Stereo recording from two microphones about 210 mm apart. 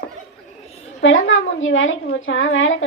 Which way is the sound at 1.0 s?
65° left (ahead or behind).